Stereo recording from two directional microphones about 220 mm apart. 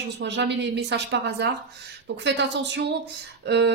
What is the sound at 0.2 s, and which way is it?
Speech, 50° right (ahead or behind).